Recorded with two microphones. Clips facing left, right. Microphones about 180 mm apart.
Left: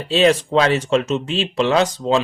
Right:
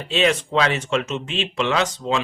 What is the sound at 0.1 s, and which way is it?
Speech, 35° left (ahead or behind).